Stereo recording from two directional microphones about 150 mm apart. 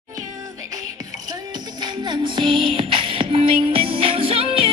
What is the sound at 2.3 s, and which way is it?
Music, 30° right (ahead or behind).